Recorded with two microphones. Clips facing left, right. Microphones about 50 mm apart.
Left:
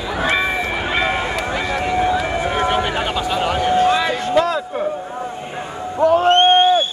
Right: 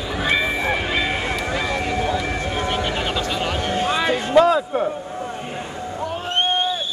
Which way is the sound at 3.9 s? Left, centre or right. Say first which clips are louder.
Left 3 dB; centre.